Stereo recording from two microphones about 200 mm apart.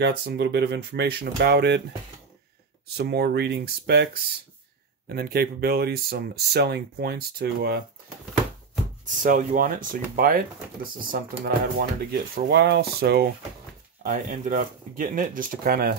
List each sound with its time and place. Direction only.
0.0 s speech: 55° right (ahead or behind)
3.0 s speech: 55° right (ahead or behind)
9.0 s speech: 40° right (ahead or behind)
14.0 s speech: 40° right (ahead or behind)